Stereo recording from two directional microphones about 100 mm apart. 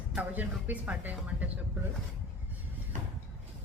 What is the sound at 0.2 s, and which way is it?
Speech, 15° right (ahead or behind).